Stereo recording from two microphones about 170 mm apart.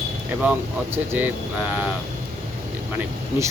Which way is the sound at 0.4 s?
10° right (ahead or behind).